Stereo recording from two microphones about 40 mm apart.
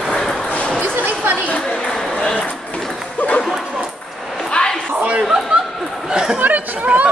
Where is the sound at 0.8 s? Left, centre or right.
Right.